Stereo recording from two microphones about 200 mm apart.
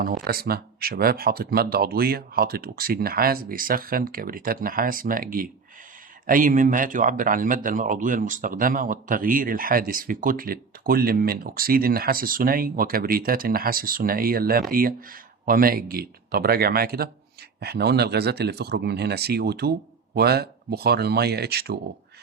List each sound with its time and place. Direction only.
0.3 s speech: 50° right (ahead or behind)